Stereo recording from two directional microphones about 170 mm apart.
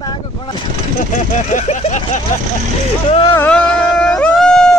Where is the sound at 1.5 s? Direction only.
45° left (ahead or behind).